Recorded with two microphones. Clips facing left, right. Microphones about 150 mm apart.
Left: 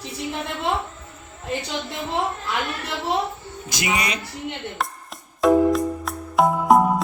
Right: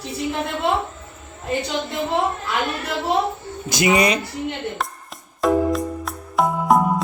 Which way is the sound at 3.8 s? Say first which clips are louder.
Right 8 dB; 35° right (ahead or behind).